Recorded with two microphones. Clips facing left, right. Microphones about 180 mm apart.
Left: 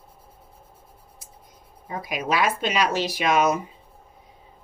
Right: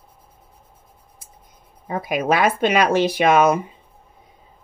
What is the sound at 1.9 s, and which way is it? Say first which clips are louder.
Speech: right 6 dB; 55° right (ahead or behind).